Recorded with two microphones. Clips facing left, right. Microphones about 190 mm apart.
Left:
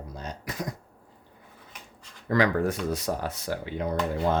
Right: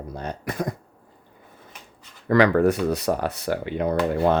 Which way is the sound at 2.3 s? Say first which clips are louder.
Right 6 dB; 70° right (ahead or behind).